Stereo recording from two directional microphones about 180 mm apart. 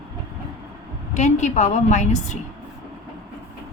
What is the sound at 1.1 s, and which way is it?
A woman's voice, 40° left (ahead or behind).